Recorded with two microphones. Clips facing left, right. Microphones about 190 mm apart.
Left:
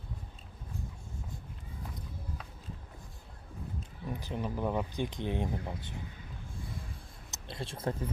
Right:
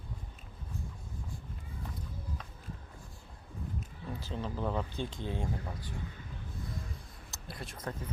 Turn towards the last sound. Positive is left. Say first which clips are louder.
# left 5 dB
turn(degrees=30)  # may be behind; listen again after turning